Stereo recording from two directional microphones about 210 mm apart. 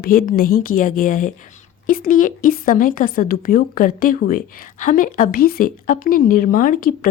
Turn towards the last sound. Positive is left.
turn(degrees=45)  # may be behind; listen again after turning